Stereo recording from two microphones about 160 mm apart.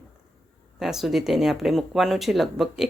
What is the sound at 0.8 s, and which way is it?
Speech, centre (ahead or behind).